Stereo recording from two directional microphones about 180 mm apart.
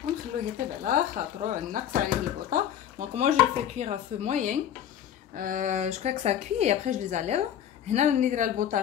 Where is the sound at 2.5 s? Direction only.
40° right (ahead or behind).